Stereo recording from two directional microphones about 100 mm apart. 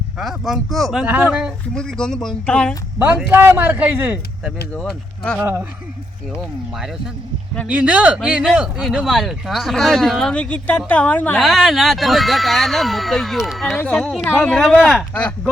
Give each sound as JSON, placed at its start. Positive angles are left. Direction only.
{"t": 0.2, "sound": "speech", "side_deg": 0}
{"t": 1.0, "sound": "speech", "side_deg": -15}
{"t": 1.7, "sound": "speech", "side_deg": 5}
{"t": 3.2, "sound": "a man's voice", "side_deg": -15}
{"t": 4.7, "sound": "speech", "side_deg": 10}
{"t": 5.4, "sound": "a man's voice", "side_deg": -20}
{"t": 6.3, "sound": "speech", "side_deg": -5}
{"t": 11.3, "sound": "speech", "side_deg": 0}
{"t": 14.3, "sound": "speech", "side_deg": 20}
{"t": 14.5, "sound": "speech", "side_deg": 5}